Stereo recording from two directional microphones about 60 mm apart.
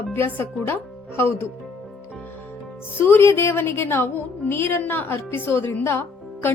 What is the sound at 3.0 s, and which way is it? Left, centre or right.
A woman's voice, left.